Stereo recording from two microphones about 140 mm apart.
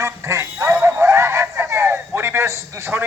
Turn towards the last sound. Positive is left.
turn(degrees=-15)  # may be behind; listen again after turning